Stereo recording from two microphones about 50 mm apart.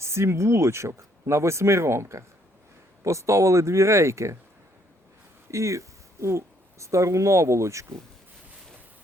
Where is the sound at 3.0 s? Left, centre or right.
Right.